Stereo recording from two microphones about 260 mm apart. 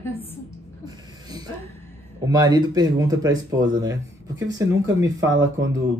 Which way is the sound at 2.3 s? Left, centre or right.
Centre.